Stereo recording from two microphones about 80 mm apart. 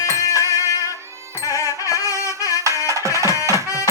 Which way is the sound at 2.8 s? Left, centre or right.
Right.